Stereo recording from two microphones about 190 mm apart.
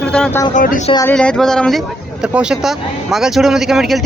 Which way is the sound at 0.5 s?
45° left (ahead or behind).